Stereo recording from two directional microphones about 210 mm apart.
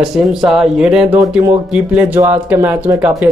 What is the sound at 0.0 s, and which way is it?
Speech, centre (ahead or behind).